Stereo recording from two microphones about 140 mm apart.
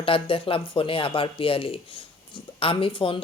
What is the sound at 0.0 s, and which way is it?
Speech, 40° left (ahead or behind).